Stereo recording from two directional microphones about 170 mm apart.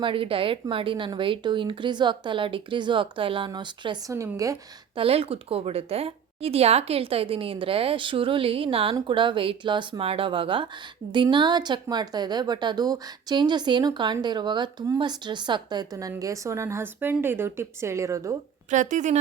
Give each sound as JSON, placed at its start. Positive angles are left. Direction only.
{"t": 0.0, "sound": "a woman's voice", "side_deg": -30}
{"t": 4.9, "sound": "a woman's voice", "side_deg": -35}
{"t": 18.7, "sound": "speech", "side_deg": -45}